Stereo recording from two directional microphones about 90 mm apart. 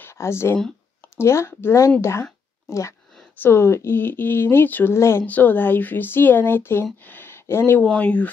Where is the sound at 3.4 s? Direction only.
30° left (ahead or behind).